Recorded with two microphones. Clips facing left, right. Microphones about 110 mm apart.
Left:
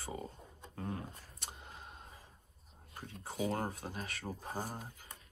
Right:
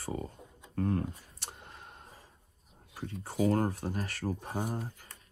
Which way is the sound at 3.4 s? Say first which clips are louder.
Right 8 dB; 50° right (ahead or behind).